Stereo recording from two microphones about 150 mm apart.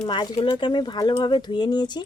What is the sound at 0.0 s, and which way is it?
Speech, 30° left (ahead or behind).